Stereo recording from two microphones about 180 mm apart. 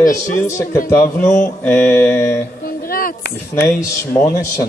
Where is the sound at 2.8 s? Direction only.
55° left (ahead or behind).